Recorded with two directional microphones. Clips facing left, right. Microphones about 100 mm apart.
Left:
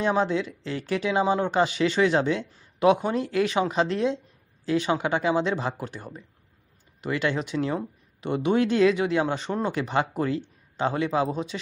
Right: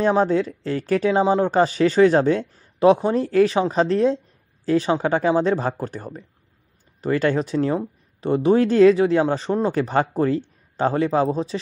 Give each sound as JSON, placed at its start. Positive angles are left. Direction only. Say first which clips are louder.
{"t": 0.0, "sound": "speech", "louder": "right 5 dB", "side_deg": -40}